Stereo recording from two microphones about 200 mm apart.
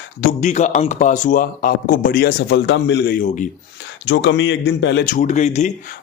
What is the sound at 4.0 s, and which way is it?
Speech, 60° left (ahead or behind).